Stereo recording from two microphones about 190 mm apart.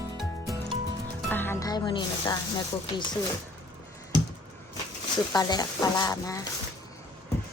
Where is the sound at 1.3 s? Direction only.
10° left (ahead or behind).